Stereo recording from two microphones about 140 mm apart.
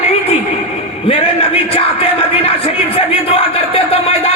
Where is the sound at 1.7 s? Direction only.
45° left (ahead or behind).